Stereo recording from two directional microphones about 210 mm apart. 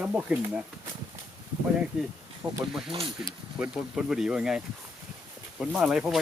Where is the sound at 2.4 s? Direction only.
10° right (ahead or behind).